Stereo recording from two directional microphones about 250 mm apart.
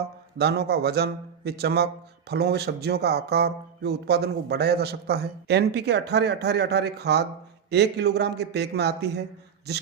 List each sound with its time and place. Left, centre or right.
0.3 s a man's voice: right